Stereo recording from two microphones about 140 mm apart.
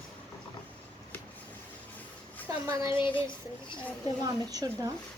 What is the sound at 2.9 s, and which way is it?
Speech, 35° left (ahead or behind).